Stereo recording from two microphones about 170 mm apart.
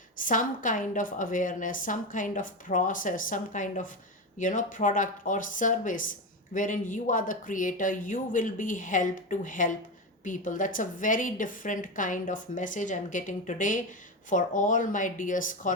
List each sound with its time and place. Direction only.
0.2 s speech: 50° left (ahead or behind)